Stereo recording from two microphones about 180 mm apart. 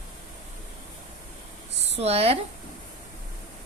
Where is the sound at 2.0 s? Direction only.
35° right (ahead or behind).